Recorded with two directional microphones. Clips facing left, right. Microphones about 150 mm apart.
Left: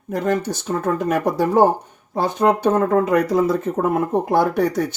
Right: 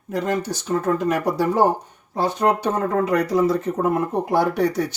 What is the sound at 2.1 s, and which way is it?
Speech, 50° left (ahead or behind).